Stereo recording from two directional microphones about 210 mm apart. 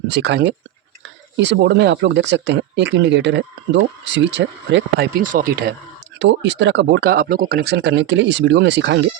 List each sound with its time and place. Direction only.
0.1 s speech: 55° right (ahead or behind)
5.2 s speech: 40° right (ahead or behind)
6.1 s speech: 60° right (ahead or behind)